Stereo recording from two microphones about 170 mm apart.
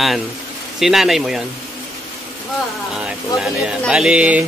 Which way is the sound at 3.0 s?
5° right (ahead or behind).